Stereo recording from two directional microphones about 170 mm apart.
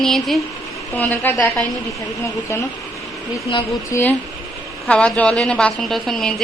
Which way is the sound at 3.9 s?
15° left (ahead or behind).